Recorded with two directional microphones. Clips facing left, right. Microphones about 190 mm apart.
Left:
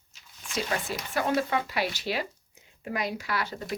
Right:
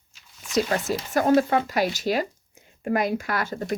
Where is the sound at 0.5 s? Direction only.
45° right (ahead or behind).